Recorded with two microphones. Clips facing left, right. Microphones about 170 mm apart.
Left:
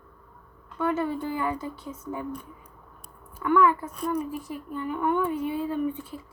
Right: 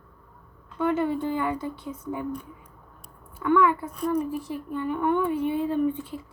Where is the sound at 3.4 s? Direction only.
20° right (ahead or behind).